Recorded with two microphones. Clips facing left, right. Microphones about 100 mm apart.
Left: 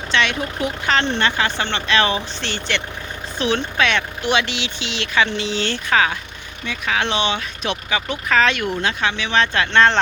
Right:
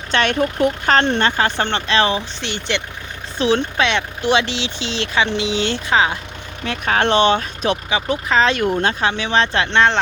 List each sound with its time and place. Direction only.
0.1 s speech: 45° right (ahead or behind); by 2.2 s 30° right (ahead or behind)
2.4 s speech: 20° right (ahead or behind)
3.3 s speech: 30° right (ahead or behind)
6.8 s speech: 45° right (ahead or behind)
7.9 s speech: 25° right (ahead or behind)